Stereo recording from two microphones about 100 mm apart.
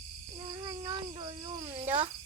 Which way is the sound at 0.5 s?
45° right (ahead or behind).